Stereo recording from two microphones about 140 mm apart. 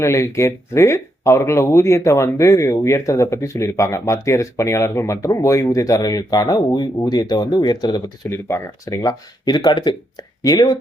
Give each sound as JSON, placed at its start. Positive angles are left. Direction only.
{"t": 0.0, "sound": "speech", "side_deg": 20}
{"t": 8.3, "sound": "speech", "side_deg": 20}